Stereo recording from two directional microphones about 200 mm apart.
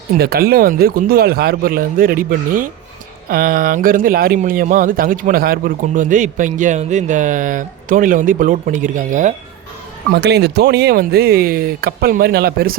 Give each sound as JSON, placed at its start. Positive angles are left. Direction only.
{"t": 0.2, "sound": "speech", "side_deg": -50}
{"t": 10.1, "sound": "speech", "side_deg": -55}